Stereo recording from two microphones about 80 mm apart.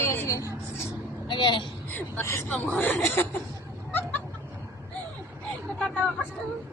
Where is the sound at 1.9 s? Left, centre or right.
Left.